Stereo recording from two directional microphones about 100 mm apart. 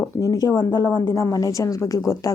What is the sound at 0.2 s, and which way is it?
A woman's voice, 35° left (ahead or behind).